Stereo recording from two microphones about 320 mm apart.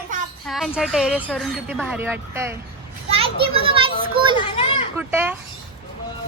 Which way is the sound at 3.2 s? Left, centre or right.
Centre.